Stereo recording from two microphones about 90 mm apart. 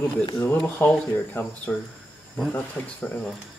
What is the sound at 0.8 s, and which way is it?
Speech, 20° left (ahead or behind).